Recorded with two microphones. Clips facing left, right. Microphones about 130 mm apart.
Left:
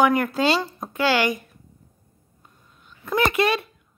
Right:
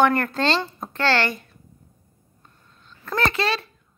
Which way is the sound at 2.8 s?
10° left (ahead or behind).